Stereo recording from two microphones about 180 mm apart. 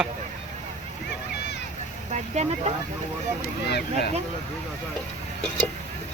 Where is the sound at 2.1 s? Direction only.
40° right (ahead or behind).